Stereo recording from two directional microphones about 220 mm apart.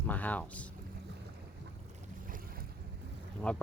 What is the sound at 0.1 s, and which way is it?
Speech, 5° left (ahead or behind).